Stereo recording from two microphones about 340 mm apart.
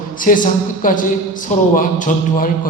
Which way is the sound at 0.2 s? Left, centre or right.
Left.